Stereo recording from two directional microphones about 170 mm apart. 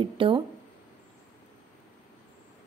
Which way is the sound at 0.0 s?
30° right (ahead or behind).